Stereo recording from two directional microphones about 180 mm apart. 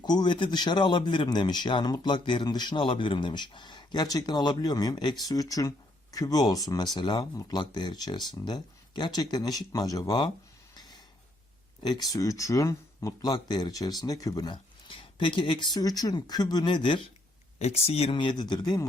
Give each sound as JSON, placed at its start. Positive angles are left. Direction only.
{"t": 0.0, "sound": "speech", "side_deg": 25}
{"t": 10.8, "sound": "a sound", "side_deg": 20}
{"t": 11.8, "sound": "speech", "side_deg": 20}